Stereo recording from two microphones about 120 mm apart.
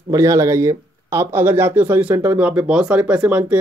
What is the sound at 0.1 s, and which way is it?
Speech, 25° right (ahead or behind).